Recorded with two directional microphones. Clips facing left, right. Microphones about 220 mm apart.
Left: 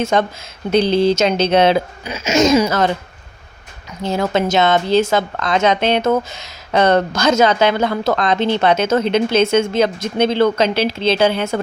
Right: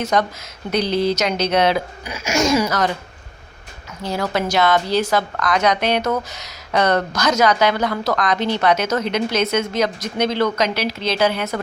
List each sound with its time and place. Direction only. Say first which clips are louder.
0.0 s a woman's voice: left 3 dB; 25° left (ahead or behind)
4.0 s a woman's voice: left 4 dB; 25° left (ahead or behind)